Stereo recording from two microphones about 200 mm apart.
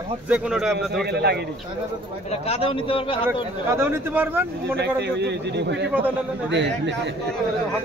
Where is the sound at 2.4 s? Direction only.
25° left (ahead or behind).